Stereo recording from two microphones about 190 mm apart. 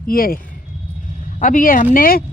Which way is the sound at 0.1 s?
50° left (ahead or behind).